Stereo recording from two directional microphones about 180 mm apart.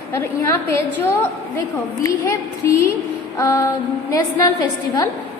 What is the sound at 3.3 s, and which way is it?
Speech, 15° left (ahead or behind).